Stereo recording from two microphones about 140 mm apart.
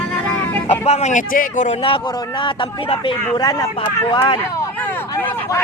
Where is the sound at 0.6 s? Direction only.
50° left (ahead or behind).